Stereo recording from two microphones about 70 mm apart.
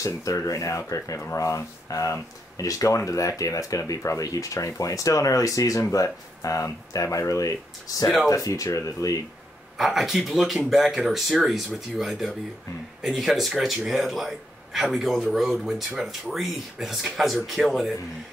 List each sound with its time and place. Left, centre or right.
0.0 s speech: left
9.8 s speech: centre